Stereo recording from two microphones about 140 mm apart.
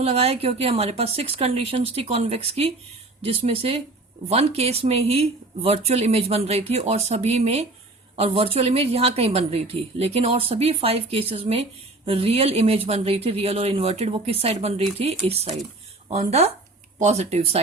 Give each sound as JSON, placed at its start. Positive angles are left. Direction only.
{"t": 0.0, "sound": "a woman's voice", "side_deg": -45}